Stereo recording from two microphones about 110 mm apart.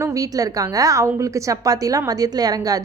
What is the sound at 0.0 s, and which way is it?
A woman's voice, 30° right (ahead or behind).